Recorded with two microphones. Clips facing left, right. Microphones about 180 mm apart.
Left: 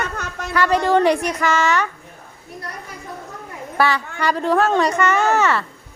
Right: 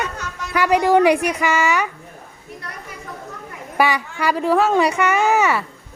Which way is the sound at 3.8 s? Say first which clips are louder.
Right 1 dB; 10° right (ahead or behind).